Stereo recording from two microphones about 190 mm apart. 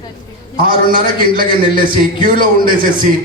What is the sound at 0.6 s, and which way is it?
Speech, 50° right (ahead or behind).